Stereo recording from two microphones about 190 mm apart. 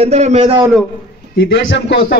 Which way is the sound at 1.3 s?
65° left (ahead or behind).